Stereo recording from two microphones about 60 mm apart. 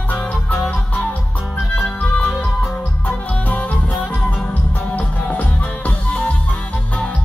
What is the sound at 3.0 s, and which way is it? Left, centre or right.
Music, left.